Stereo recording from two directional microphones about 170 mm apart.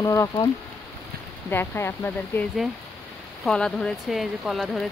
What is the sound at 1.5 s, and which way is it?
Speech, 15° left (ahead or behind).